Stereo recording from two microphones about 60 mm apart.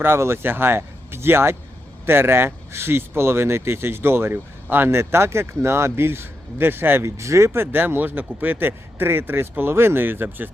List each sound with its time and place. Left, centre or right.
0.0 s speech: right
7.2 s speech: right